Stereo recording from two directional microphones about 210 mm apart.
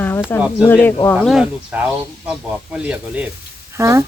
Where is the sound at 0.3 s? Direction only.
10° left (ahead or behind).